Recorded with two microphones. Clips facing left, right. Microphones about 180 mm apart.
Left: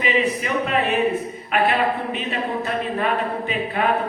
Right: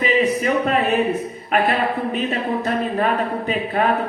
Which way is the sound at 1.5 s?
40° right (ahead or behind).